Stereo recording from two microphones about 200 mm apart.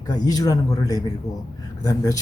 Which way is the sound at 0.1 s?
20° left (ahead or behind).